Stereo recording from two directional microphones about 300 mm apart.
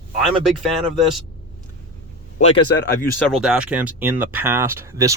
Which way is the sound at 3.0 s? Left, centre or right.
Centre.